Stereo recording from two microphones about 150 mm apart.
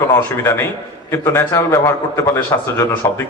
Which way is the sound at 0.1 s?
15° left (ahead or behind).